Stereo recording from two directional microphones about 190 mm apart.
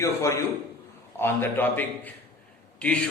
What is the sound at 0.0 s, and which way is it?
A man's voice, 15° left (ahead or behind).